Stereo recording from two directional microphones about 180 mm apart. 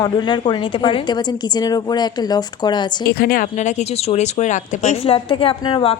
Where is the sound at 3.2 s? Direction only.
55° left (ahead or behind).